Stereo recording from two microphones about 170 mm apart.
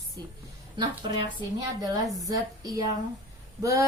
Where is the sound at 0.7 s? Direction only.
25° right (ahead or behind).